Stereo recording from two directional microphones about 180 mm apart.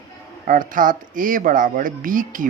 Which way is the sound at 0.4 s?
45° right (ahead or behind).